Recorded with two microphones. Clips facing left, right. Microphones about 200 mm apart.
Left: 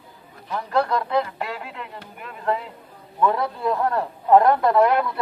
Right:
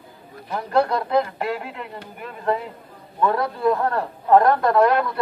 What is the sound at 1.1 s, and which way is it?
Speech, 50° right (ahead or behind).